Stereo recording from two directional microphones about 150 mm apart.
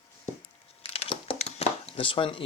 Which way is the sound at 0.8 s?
40° left (ahead or behind).